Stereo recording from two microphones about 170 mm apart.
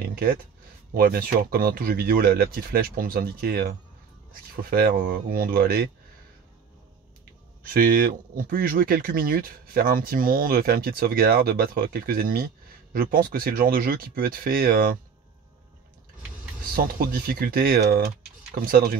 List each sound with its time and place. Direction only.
0.1 s speech: 60° right (ahead or behind)
7.6 s speech: 60° right (ahead or behind)
16.7 s speech: 55° right (ahead or behind)